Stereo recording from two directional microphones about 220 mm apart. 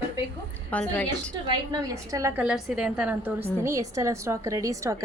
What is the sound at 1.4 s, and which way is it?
A woman's voice, 15° right (ahead or behind).